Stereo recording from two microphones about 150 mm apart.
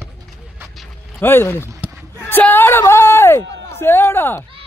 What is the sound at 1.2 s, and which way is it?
Speech, 15° left (ahead or behind).